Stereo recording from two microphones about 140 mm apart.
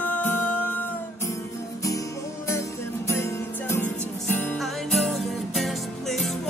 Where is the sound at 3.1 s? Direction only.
20° left (ahead or behind).